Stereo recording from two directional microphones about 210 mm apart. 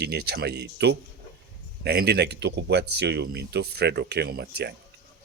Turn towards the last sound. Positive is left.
turn(degrees=-50)  # may be behind; listen again after turning